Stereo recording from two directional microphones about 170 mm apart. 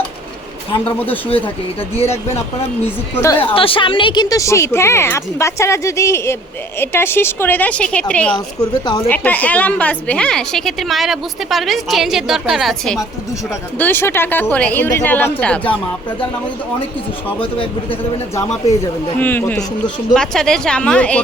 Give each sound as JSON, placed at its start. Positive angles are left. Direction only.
{"t": 0.9, "sound": "a woman's voice", "side_deg": 10}
{"t": 2.0, "sound": "speech", "side_deg": 35}
{"t": 2.8, "sound": "a woman's voice", "side_deg": 15}
{"t": 3.4, "sound": "a woman's voice", "side_deg": 30}
{"t": 13.7, "sound": "a woman's voice", "side_deg": 10}
{"t": 19.2, "sound": "a woman's voice", "side_deg": 10}